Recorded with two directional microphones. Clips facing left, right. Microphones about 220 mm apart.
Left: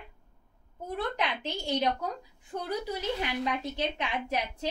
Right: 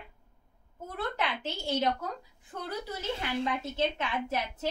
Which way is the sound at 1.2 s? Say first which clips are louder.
Left 1 dB; 15° left (ahead or behind).